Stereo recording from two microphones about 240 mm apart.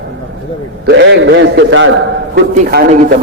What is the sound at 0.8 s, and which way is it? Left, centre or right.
A man's voice, right.